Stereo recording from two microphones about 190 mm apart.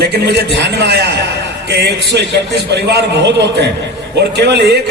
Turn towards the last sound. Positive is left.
turn(degrees=-60)  # may be behind; listen again after turning